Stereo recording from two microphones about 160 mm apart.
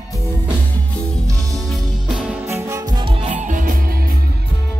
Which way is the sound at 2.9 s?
35° right (ahead or behind).